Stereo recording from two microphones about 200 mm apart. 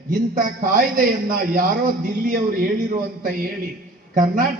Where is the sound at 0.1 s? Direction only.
45° right (ahead or behind).